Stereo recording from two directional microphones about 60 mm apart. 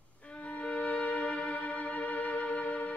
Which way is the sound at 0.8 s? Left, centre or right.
Left.